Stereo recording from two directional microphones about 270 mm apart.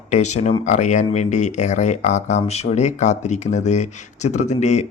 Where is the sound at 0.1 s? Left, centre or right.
Left.